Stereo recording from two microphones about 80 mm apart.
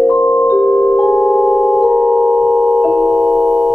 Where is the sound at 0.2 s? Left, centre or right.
Centre.